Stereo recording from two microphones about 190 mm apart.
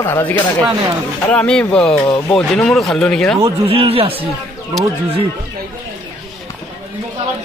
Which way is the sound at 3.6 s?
30° right (ahead or behind).